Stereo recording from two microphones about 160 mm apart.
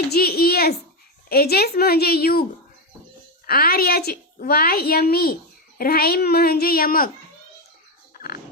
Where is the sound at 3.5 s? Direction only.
70° left (ahead or behind).